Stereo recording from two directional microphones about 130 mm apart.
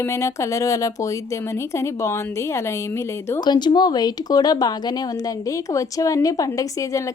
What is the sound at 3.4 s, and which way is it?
A woman's voice, 35° left (ahead or behind).